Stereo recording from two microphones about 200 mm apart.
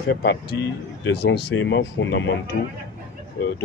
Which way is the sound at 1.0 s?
65° left (ahead or behind).